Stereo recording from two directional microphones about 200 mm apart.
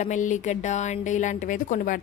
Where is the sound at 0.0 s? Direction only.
35° left (ahead or behind).